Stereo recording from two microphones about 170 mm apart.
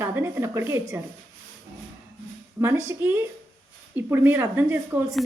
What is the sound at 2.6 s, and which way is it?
Speech, 15° right (ahead or behind).